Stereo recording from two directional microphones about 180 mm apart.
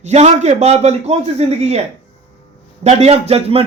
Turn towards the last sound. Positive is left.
turn(degrees=-35)  # may be behind; listen again after turning